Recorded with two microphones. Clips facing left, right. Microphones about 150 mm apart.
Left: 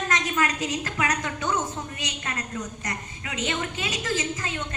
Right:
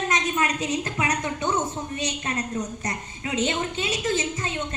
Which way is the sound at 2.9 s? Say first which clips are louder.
Right 4 dB; 30° right (ahead or behind).